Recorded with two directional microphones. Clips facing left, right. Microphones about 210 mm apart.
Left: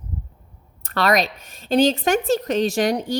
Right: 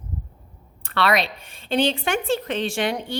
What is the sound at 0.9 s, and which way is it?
A woman's voice, 40° left (ahead or behind).